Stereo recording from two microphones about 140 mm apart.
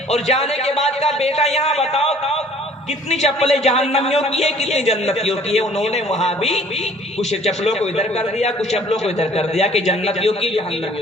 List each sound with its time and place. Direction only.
0.1 s speech: 50° left (ahead or behind)